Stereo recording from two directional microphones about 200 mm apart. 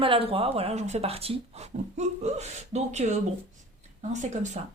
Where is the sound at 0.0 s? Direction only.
25° right (ahead or behind).